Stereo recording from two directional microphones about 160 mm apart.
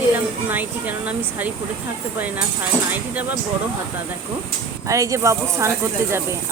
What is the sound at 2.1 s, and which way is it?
Speech, 10° right (ahead or behind).